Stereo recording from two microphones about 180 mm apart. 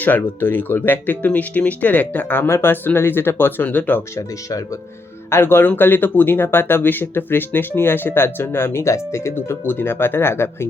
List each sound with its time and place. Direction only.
0.0 s speech: 10° left (ahead or behind)